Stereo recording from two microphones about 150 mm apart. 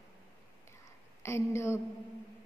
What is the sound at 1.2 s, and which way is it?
Speech, 20° left (ahead or behind).